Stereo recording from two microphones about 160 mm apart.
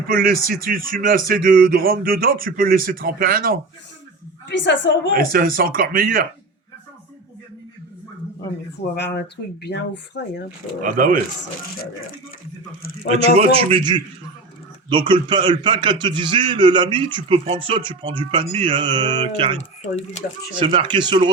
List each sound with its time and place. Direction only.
0.1 s speech: 65° right (ahead or behind)
4.4 s speech: 90° left
5.1 s speech: 65° right (ahead or behind)
9.0 s speech: 90° left
10.8 s speech: 60° right (ahead or behind)
13.1 s a man's voice: 40° right (ahead or behind)
19.5 s speech: 45° left (ahead or behind)
20.6 s a man's voice: 30° right (ahead or behind)